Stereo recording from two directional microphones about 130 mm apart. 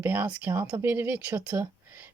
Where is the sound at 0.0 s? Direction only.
15° right (ahead or behind).